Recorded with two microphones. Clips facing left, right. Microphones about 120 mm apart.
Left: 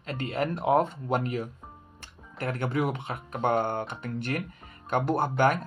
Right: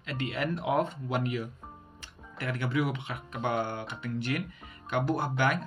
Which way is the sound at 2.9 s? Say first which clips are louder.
Left 3 dB; 45° left (ahead or behind).